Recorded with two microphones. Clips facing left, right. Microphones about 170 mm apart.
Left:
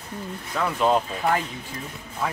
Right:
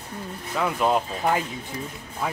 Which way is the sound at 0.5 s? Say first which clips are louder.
Left 1 dB; 5° right (ahead or behind).